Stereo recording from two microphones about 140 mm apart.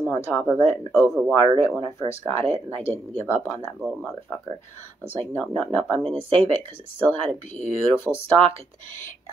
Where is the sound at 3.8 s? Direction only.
Centre (ahead or behind).